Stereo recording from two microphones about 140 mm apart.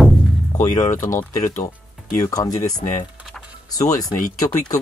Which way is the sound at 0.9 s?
65° left (ahead or behind).